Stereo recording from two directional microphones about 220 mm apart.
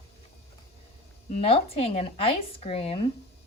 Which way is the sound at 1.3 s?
25° left (ahead or behind).